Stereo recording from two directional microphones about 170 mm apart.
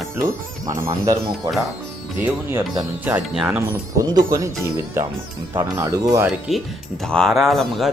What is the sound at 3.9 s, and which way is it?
Speech, 20° right (ahead or behind).